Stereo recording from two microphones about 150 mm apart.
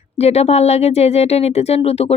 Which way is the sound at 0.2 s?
45° left (ahead or behind).